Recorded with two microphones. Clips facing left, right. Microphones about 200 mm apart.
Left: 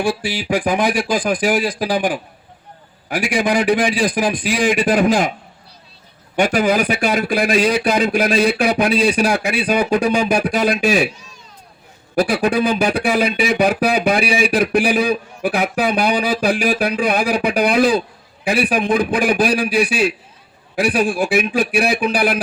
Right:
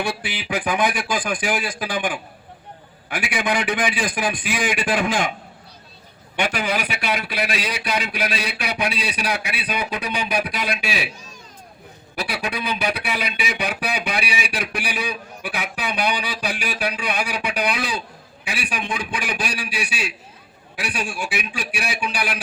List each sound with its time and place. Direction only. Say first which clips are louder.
0.3 s speech: left 2 dB; 50° left (ahead or behind)
1.6 s a man's voice: left 7 dB; 35° left (ahead or behind)
6.3 s speech: left 8 dB; 45° left (ahead or behind)
12.1 s speech: left 11 dB; 45° left (ahead or behind)